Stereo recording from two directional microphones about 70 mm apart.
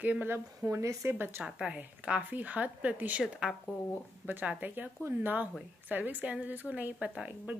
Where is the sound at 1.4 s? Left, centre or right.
Centre.